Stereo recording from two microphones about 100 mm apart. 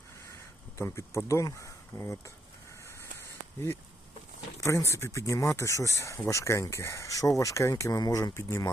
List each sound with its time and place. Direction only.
0.8 s speech: 30° left (ahead or behind)
2.8 s a sound: 25° left (ahead or behind)
4.6 s speech: 30° left (ahead or behind)